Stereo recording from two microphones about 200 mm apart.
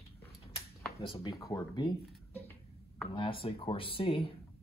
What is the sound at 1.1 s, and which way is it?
Speech, 20° left (ahead or behind).